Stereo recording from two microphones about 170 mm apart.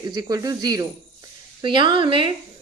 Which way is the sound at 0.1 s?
20° right (ahead or behind).